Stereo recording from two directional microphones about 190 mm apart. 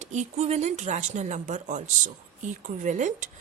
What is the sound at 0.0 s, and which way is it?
Speech, 35° right (ahead or behind).